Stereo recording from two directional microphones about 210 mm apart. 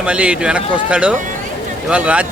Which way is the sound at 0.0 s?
5° right (ahead or behind).